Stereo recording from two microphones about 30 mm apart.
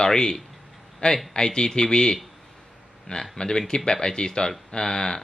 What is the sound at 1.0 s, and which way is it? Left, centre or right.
Speech, left.